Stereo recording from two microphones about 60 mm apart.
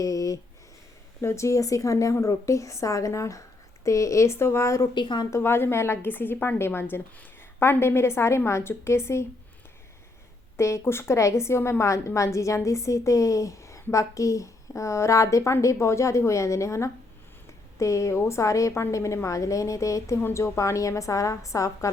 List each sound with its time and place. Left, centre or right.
0.0 s speech: left
1.2 s a woman's voice: left
10.6 s a woman's voice: left